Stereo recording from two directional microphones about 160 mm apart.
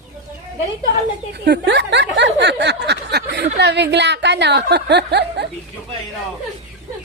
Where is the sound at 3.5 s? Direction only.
90° right.